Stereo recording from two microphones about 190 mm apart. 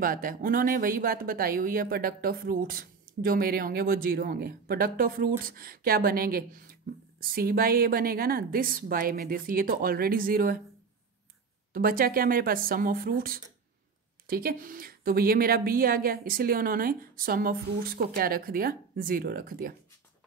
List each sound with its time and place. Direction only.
0.0 s a woman's voice: 50° right (ahead or behind)
11.7 s a woman's voice: 50° right (ahead or behind)